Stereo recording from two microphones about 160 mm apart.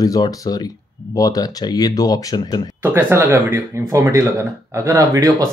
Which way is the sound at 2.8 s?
15° right (ahead or behind).